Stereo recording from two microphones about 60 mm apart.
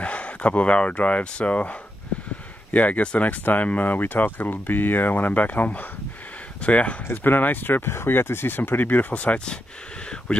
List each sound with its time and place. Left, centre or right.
0.0 s speech: left
7.1 s speech: left; by 9.6 s centre